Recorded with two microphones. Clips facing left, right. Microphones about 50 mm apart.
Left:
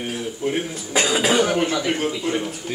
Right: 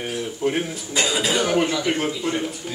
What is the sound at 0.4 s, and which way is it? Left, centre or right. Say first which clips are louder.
Speech: right 1 dB; centre.